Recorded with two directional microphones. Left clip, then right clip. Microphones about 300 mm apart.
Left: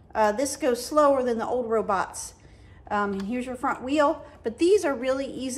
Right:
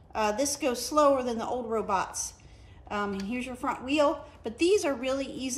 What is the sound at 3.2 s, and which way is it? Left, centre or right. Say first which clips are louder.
A woman's voice: left 4 dB; centre.